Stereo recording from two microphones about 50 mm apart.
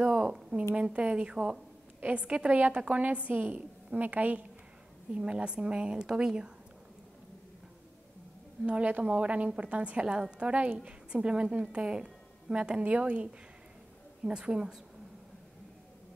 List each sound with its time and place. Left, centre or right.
0.0 s a woman's voice: centre; by 4.5 s right
5.1 s a woman's voice: right
8.6 s a woman's voice: right